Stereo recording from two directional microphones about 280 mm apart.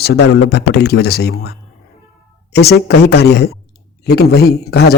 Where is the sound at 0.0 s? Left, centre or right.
Left.